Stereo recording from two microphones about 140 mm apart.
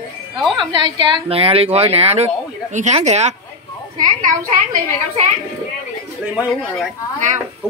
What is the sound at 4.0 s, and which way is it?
Speech, 65° right (ahead or behind).